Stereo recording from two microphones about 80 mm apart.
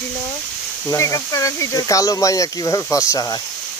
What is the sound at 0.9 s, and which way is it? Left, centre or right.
Speech, left.